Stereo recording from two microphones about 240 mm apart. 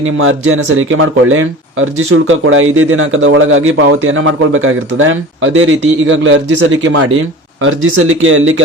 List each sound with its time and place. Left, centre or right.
0.0 s a man's voice: right